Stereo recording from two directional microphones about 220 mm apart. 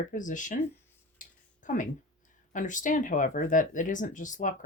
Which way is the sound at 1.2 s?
35° left (ahead or behind).